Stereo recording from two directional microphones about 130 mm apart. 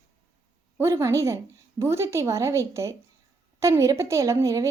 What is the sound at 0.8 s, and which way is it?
A woman's voice, 20° right (ahead or behind).